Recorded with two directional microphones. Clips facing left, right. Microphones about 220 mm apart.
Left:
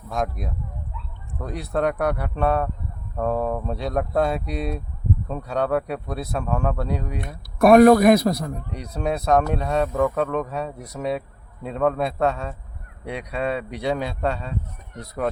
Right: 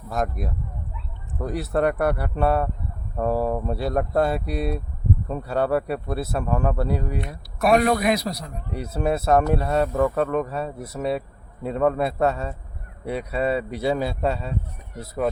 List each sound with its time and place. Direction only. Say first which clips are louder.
0.1 s speech: even; centre (ahead or behind)
7.6 s a man's voice: left 7 dB; 50° left (ahead or behind)
8.7 s speech: right 4 dB; 5° right (ahead or behind)